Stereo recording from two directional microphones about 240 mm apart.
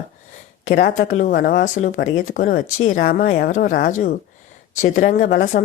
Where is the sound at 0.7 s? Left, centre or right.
Left.